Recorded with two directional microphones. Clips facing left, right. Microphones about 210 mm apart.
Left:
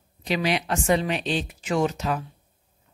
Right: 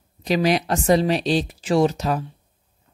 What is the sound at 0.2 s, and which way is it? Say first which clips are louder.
Speech: right 5 dB; 40° right (ahead or behind).